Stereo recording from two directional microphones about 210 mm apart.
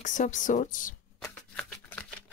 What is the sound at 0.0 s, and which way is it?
Speech, 35° left (ahead or behind).